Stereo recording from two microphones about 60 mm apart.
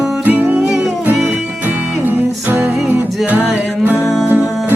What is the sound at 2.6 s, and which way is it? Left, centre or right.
Music, right.